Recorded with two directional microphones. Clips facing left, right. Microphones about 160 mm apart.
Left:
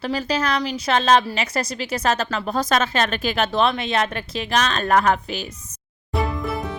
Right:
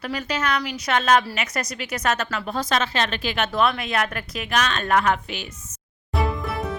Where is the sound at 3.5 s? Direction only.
25° left (ahead or behind).